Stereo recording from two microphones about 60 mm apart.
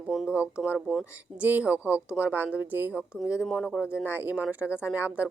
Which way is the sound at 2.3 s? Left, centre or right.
Right.